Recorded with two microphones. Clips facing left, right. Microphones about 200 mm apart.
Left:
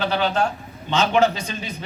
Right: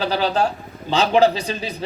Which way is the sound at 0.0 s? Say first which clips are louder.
Right 2 dB; 35° right (ahead or behind).